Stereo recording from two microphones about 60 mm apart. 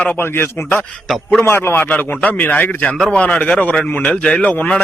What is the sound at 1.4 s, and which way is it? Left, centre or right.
A man's voice, left.